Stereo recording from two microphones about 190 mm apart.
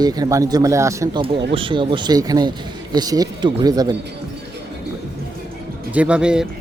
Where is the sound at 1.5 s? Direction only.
25° right (ahead or behind).